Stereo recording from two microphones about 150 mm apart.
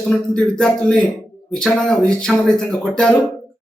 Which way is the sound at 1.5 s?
5° left (ahead or behind).